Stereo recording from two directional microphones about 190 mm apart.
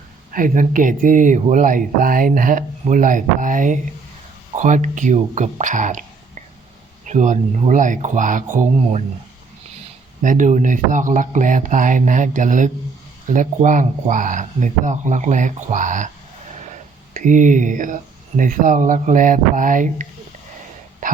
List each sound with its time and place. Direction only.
0.3 s speech: 45° right (ahead or behind)
10.2 s speech: 40° right (ahead or behind)